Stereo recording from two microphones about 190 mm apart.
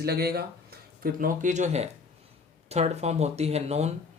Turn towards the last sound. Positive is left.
turn(degrees=-35)  # may be behind; listen again after turning